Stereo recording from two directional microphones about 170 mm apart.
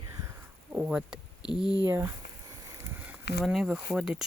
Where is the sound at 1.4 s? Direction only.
25° left (ahead or behind).